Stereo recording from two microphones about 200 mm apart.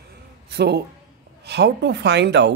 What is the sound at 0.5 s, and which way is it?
Speech, 55° right (ahead or behind).